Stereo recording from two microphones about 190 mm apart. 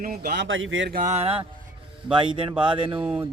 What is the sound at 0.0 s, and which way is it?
Speech, 55° right (ahead or behind).